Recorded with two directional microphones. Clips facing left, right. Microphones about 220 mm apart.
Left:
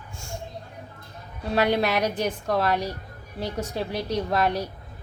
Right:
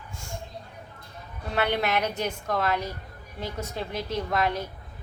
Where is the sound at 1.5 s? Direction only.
40° left (ahead or behind).